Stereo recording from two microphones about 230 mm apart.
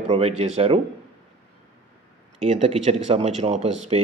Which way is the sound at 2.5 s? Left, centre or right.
Right.